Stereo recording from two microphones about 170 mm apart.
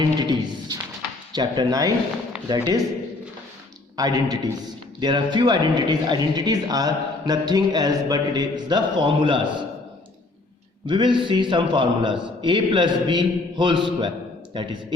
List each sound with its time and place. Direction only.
0.2 s a sound: 25° right (ahead or behind)
1.3 s speech: 25° right (ahead or behind)
3.9 s a man's voice: 20° right (ahead or behind)
10.8 s speech: 30° right (ahead or behind)